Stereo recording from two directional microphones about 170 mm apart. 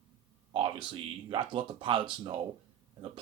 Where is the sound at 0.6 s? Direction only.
30° right (ahead or behind).